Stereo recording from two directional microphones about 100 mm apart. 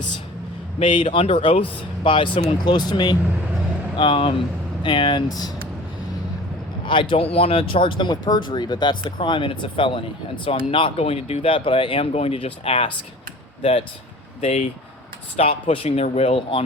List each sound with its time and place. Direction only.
0.8 s speech: 60° left (ahead or behind)
3.9 s speech: 60° left (ahead or behind)
6.8 s speech: 60° left (ahead or behind); by 13.8 s 80° left
15.4 s speech: 80° left